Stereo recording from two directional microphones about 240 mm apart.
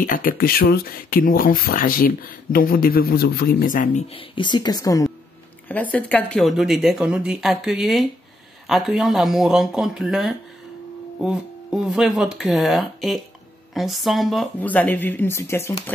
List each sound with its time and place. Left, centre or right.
0.0 s speech: left; by 15.8 s centre